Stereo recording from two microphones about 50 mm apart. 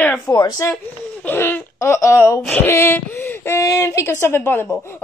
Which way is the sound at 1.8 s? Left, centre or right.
Left.